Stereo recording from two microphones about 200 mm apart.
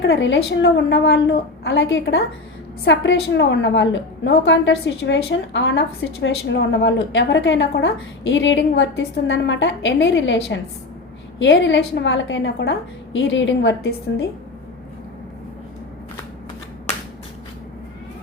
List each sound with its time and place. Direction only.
0.0 s a woman's voice: 65° left (ahead or behind)